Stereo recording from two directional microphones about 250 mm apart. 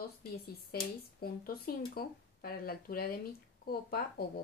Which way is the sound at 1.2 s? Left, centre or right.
Left.